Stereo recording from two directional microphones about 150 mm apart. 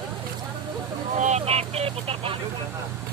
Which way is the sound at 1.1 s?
50° right (ahead or behind).